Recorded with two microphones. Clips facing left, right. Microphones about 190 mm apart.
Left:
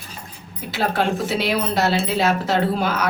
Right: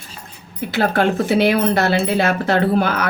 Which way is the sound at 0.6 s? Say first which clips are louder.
Right 4 dB; 55° right (ahead or behind).